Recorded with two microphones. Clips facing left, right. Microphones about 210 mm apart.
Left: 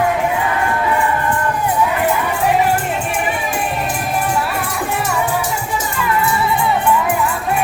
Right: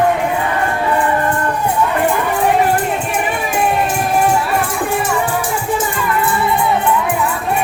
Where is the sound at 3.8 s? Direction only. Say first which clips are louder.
Right 5 dB; 45° right (ahead or behind).